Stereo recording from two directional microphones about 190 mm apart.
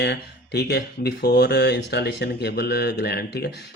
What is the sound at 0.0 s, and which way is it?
Speech, 60° left (ahead or behind).